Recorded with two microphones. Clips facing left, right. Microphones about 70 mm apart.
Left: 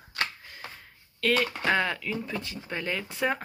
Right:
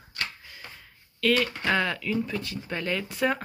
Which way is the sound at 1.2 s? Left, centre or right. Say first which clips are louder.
Right 1 dB; left.